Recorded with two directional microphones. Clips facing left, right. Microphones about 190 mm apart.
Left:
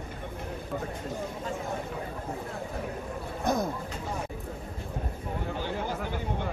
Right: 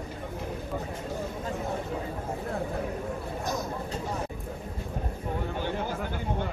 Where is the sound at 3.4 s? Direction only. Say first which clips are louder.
Left 7 dB; 55° left (ahead or behind).